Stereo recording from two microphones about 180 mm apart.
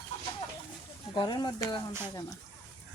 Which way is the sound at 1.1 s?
25° left (ahead or behind).